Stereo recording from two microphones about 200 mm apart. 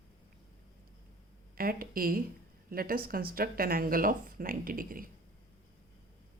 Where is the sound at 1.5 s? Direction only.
45° right (ahead or behind).